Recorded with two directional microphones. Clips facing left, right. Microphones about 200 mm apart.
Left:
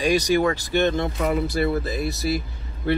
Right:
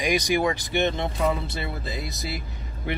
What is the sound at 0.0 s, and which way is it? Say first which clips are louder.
Speech: left 3 dB; 15° right (ahead or behind).